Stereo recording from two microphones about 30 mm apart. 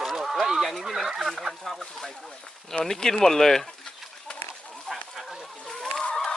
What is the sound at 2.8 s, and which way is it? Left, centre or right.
Speech, centre.